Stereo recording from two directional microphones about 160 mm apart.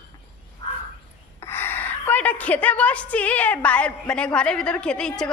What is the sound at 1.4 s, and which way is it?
A woman's voice, 15° left (ahead or behind).